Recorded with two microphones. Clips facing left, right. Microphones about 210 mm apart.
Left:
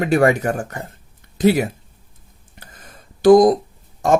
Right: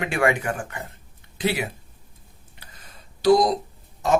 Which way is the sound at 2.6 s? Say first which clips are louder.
Left 5 dB; 50° left (ahead or behind).